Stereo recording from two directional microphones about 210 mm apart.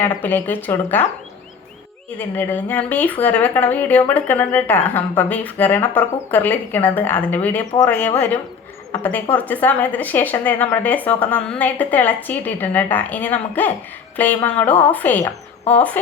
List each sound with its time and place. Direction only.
0.0 s a woman's voice: 10° left (ahead or behind)
2.1 s a woman's voice: 10° left (ahead or behind)